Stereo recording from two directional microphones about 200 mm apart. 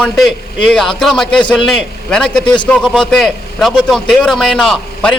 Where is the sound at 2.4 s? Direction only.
25° left (ahead or behind).